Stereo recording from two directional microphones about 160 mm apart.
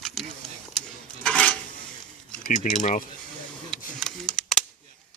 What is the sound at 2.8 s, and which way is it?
Speech, 55° left (ahead or behind).